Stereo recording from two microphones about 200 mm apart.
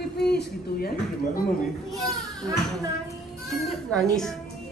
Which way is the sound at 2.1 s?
15° right (ahead or behind).